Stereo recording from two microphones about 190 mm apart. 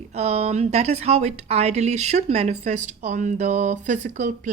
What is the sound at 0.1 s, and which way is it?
Speech, 35° right (ahead or behind).